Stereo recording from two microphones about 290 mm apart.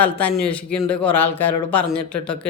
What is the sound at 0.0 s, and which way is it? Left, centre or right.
Speech, centre.